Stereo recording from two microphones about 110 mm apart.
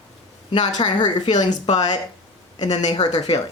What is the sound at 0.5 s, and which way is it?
A woman's voice, 45° left (ahead or behind).